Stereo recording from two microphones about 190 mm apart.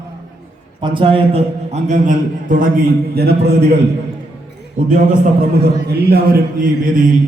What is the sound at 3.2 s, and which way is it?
Speech, 55° right (ahead or behind).